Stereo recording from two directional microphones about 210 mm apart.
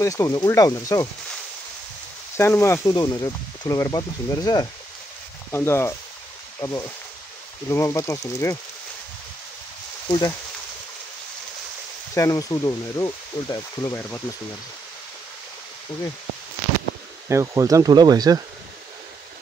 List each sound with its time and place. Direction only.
0.0 s speech: 15° left (ahead or behind)
2.3 s speech: 10° left (ahead or behind)
10.0 s speech: 20° left (ahead or behind)
12.1 s speech: 15° left (ahead or behind)
17.3 s speech: 15° right (ahead or behind)